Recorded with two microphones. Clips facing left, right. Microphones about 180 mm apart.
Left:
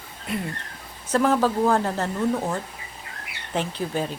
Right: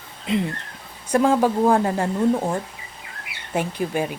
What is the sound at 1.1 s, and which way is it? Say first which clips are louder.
Speech: right 3 dB; 15° right (ahead or behind).